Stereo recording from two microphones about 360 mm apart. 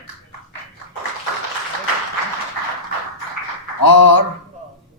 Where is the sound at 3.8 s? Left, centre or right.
Left.